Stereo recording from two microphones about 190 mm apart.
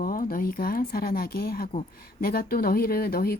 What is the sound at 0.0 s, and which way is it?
Speech, 50° left (ahead or behind).